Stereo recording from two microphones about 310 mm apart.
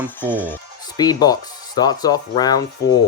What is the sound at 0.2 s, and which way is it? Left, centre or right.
Speech, centre.